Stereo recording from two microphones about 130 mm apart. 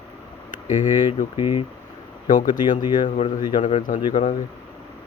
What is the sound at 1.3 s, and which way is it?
Speech, 45° left (ahead or behind).